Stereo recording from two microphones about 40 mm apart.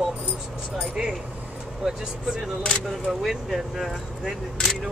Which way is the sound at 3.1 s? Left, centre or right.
Centre.